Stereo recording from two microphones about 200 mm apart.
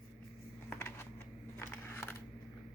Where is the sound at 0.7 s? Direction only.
10° left (ahead or behind).